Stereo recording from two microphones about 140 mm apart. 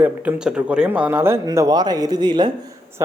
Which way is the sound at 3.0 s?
20° right (ahead or behind).